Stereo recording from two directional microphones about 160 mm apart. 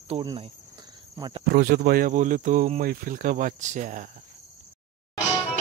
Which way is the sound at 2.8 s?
65° right (ahead or behind).